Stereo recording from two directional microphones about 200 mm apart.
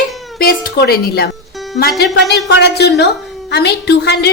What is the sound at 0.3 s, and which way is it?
A woman's voice, 50° left (ahead or behind).